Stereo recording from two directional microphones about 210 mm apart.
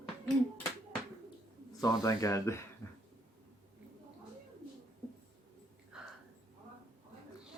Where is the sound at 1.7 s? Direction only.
15° left (ahead or behind).